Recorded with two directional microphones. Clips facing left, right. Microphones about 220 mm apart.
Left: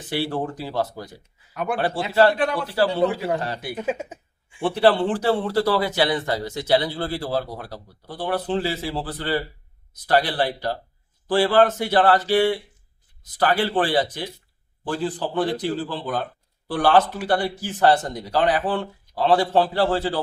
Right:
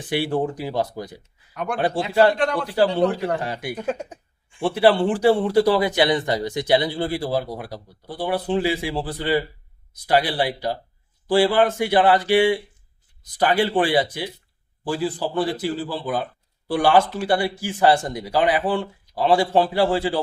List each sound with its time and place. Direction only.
0.1 s a man's voice: 15° right (ahead or behind)
1.5 s a man's voice: 5° left (ahead or behind)
1.8 s a man's voice: 15° right (ahead or behind)
2.3 s speech: 5° left (ahead or behind)
3.3 s a man's voice: 15° right (ahead or behind)
3.8 s speech: 5° left (ahead or behind)
4.6 s a man's voice: 10° right (ahead or behind)